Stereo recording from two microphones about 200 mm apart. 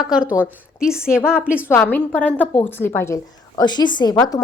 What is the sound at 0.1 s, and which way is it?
A woman's voice, 5° right (ahead or behind).